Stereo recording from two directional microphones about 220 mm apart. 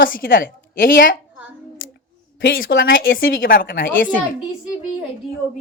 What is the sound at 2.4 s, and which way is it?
Speech, 55° left (ahead or behind).